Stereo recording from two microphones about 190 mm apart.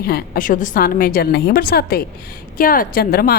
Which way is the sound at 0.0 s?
50° left (ahead or behind).